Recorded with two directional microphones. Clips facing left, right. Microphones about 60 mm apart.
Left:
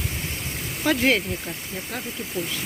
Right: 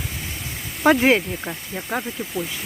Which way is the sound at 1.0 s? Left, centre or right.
Right.